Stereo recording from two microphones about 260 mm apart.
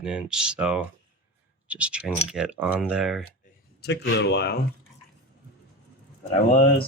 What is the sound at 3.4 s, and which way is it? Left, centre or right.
Speech, left.